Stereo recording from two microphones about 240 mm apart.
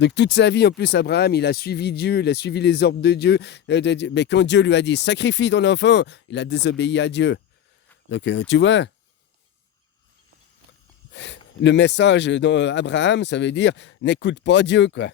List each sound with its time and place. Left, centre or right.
0.0 s speech: left
11.1 s speech: left